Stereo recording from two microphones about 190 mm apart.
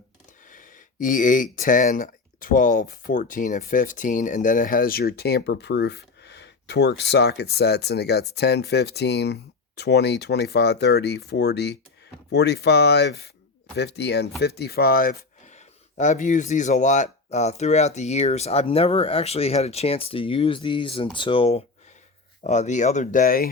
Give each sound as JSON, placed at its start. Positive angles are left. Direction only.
{"t": 0.5, "sound": "speech", "side_deg": 45}